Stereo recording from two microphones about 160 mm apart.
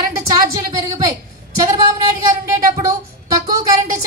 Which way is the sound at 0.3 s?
20° right (ahead or behind).